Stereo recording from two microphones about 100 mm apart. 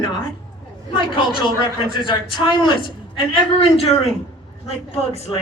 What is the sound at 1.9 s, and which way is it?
Speech, 55° left (ahead or behind).